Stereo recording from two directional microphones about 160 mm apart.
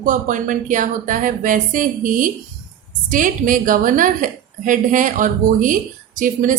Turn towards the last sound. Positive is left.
turn(degrees=-55)  # may be behind; listen again after turning